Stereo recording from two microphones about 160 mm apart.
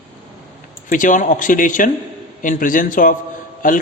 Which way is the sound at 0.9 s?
55° left (ahead or behind).